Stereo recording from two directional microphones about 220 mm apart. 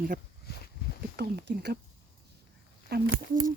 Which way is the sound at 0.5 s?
45° left (ahead or behind).